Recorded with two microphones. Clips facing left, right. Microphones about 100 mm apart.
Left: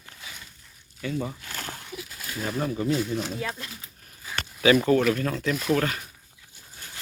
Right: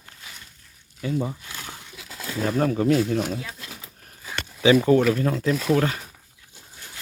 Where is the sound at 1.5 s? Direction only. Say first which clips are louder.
Left 2 dB; 50° left (ahead or behind).